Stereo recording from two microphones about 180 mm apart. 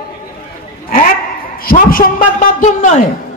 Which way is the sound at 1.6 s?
50° left (ahead or behind).